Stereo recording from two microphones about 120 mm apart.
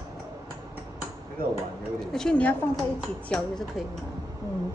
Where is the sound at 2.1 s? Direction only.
5° left (ahead or behind).